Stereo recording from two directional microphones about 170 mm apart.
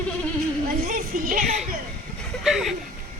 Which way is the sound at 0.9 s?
50° right (ahead or behind).